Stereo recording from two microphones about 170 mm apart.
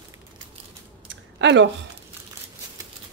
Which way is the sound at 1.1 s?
90° right.